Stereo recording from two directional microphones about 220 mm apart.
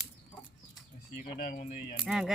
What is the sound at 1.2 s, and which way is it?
Speech, 40° left (ahead or behind).